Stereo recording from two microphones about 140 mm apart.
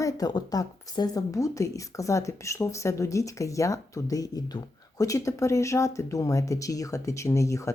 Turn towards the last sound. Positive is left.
turn(degrees=20)  # may be behind; listen again after turning